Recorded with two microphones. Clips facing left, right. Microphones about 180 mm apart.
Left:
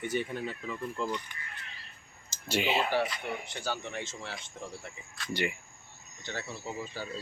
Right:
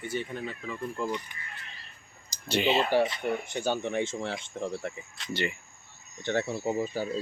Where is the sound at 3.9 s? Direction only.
55° right (ahead or behind).